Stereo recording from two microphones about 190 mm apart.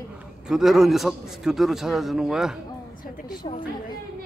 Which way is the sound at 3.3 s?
25° left (ahead or behind).